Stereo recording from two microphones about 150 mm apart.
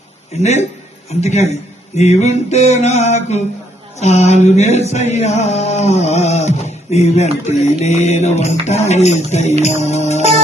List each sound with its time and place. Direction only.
1.2 s music: 50° left (ahead or behind)